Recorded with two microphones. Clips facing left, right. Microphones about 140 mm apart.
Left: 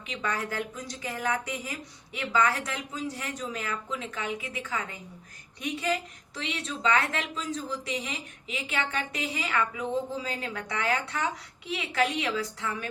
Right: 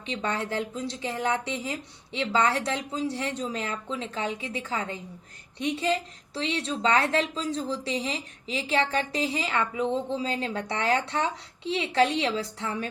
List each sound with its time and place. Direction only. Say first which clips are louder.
0.1 s a woman's voice: right 3 dB; 30° right (ahead or behind)